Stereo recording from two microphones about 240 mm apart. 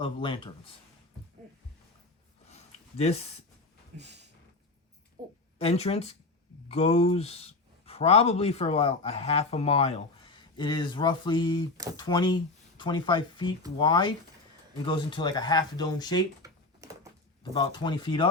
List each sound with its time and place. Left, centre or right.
0.0 s speech: left
3.0 s speech: left
3.9 s a sound: right
5.2 s a sound: centre
5.5 s speech: left
16.4 s computer keyboard: centre
17.5 s speech: centre